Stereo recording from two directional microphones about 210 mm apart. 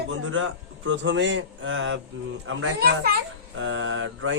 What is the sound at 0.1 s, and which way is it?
A man's voice, 70° right (ahead or behind).